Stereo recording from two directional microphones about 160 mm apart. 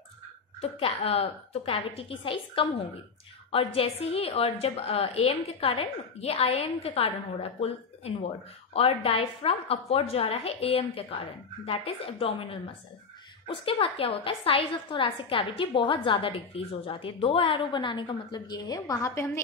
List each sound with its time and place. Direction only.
0.6 s a woman's voice: 35° left (ahead or behind); by 19.4 s 15° left (ahead or behind)